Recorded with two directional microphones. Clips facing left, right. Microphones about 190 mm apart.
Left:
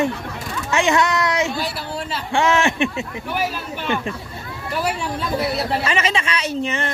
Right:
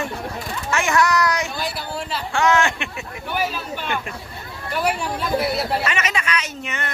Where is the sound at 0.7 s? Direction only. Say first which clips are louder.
Left 2 dB; 20° left (ahead or behind).